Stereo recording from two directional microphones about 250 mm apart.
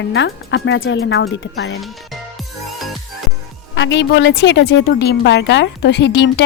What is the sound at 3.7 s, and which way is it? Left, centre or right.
A woman's voice, left.